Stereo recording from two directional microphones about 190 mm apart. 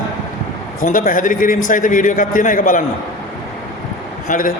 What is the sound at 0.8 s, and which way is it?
A man's voice, 45° left (ahead or behind).